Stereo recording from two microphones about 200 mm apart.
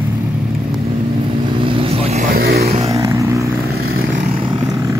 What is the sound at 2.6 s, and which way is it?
Vehicle, 30° right (ahead or behind).